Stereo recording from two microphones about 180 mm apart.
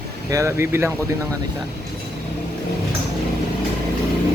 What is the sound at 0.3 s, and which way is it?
Speech, 15° right (ahead or behind).